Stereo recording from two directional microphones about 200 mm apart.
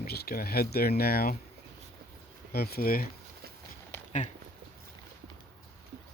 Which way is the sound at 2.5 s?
50° left (ahead or behind).